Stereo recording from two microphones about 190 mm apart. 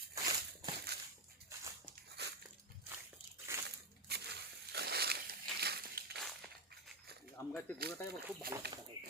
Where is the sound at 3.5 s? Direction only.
15° right (ahead or behind).